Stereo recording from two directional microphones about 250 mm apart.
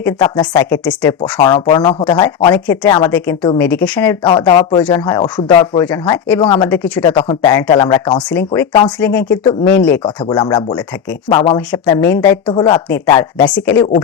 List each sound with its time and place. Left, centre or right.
0.0 s speech: centre
0.6 s speech: centre
1.4 s speech: centre
3.1 s speech: centre
4.2 s speech: centre
6.7 s speech: centre
7.0 s speech: centre
9.0 s speech: centre
10.2 s speech: centre